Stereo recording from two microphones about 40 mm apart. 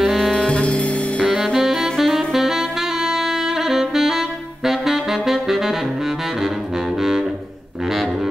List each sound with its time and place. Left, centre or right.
0.0 s saxophone: centre
0.3 s saxophone: left
0.6 s music: left
1.2 s saxophone: centre
7.0 s music: centre